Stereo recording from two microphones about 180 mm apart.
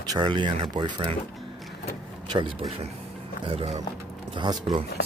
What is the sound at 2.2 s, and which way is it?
Vehicle, 25° right (ahead or behind).